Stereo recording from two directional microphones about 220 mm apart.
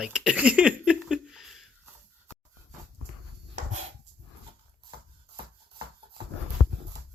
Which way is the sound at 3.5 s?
30° right (ahead or behind).